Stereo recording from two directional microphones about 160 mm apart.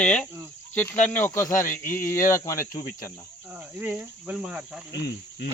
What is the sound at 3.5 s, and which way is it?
Cricket, 10° right (ahead or behind).